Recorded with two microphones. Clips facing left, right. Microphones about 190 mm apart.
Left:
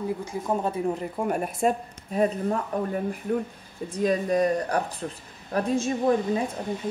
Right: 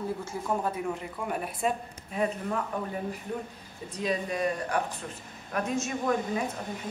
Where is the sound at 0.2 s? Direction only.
25° left (ahead or behind).